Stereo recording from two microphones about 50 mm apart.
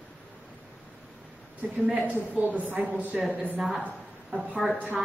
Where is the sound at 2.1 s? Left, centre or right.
Right.